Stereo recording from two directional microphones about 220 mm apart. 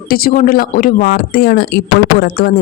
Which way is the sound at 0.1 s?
40° left (ahead or behind).